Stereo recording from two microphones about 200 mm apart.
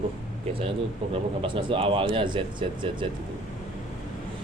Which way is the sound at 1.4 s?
25° right (ahead or behind).